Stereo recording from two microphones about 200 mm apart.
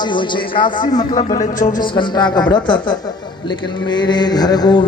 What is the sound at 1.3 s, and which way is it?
Speech, 40° left (ahead or behind).